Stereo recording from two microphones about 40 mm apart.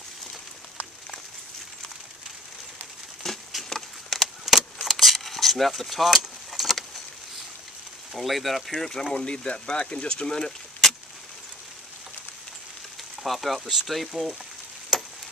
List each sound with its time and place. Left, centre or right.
3.3 s patter: centre
3.6 s a sound: centre
4.8 s keys jangling: centre
8.1 s speech: centre
8.7 s speech: centre
9.1 s speech: left
13.2 s speech: centre
14.9 s a sound: centre